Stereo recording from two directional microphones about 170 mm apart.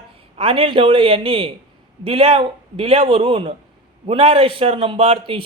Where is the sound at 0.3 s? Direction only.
35° right (ahead or behind).